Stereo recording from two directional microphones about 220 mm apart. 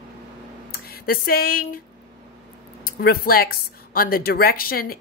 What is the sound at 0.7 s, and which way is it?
Speech, 45° left (ahead or behind).